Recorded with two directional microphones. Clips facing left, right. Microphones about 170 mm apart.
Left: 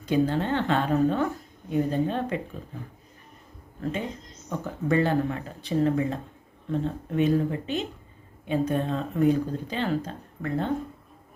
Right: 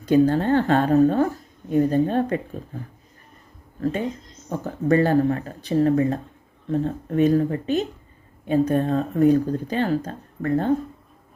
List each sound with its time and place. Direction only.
0.0 s speech: 45° right (ahead or behind)
4.4 s speech: 40° right (ahead or behind)